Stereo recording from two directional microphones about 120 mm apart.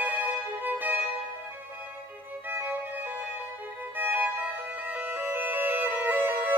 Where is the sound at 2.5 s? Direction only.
15° right (ahead or behind).